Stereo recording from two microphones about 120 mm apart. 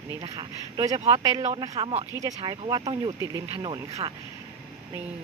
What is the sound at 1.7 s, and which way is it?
Speech, 60° right (ahead or behind).